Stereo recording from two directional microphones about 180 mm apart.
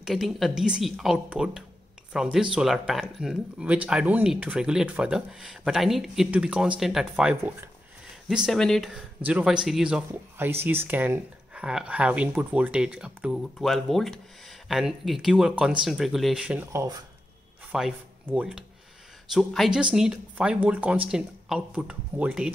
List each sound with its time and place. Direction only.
0.0 s speech: centre (ahead or behind)